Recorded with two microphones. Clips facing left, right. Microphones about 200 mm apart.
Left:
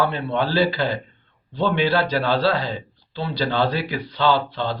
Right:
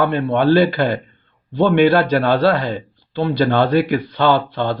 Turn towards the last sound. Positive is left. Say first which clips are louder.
# right 4 dB
turn(degrees=-55)  # may be behind; listen again after turning